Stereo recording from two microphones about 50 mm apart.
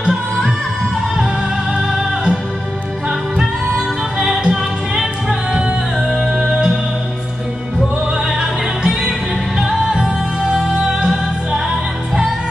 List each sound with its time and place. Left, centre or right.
0.0 s music: centre
1.8 s music: centre
8.4 s music: centre